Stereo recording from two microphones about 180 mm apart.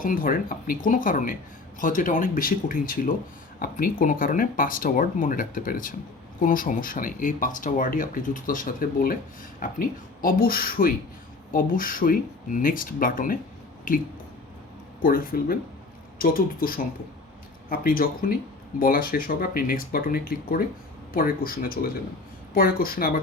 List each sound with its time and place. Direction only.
0.0 s speech: 50° left (ahead or behind)
15.0 s speech: 50° left (ahead or behind)